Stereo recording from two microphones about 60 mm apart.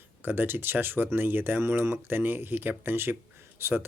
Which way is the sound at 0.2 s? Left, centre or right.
Right.